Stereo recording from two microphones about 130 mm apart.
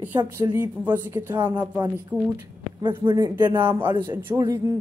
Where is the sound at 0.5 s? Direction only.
15° right (ahead or behind).